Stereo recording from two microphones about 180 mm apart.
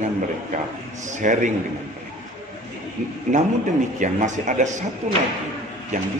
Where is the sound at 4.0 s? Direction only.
45° right (ahead or behind).